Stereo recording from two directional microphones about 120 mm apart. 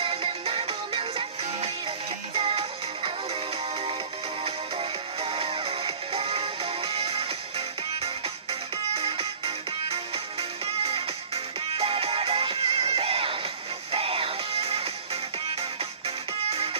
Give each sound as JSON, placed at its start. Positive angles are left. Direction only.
{"t": 0.0, "sound": "music", "side_deg": -50}
{"t": 4.5, "sound": "music", "side_deg": -55}
{"t": 16.4, "sound": "music", "side_deg": -55}